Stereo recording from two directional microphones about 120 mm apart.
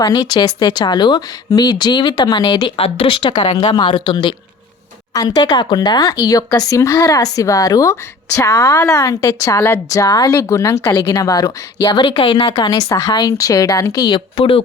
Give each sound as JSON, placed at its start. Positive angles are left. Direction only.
{"t": 0.0, "sound": "speech", "side_deg": 35}
{"t": 2.7, "sound": "speech", "side_deg": 55}
{"t": 12.5, "sound": "speech", "side_deg": 30}
{"t": 14.3, "sound": "speech", "side_deg": 50}